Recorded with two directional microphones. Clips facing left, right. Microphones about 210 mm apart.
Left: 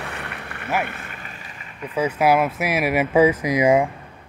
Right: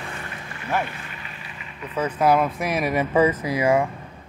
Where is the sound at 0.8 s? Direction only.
45° left (ahead or behind).